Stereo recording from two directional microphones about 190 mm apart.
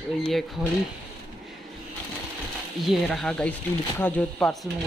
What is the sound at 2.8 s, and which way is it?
Speech, centre (ahead or behind).